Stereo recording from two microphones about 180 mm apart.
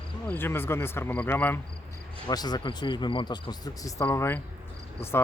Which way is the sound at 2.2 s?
20° left (ahead or behind).